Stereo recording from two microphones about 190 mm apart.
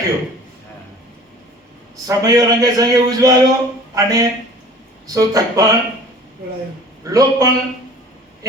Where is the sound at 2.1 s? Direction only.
20° right (ahead or behind).